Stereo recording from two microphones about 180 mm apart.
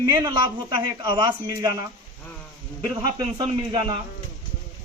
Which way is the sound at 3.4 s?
25° right (ahead or behind).